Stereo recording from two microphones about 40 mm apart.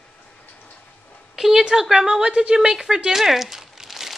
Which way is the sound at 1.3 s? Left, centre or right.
Centre.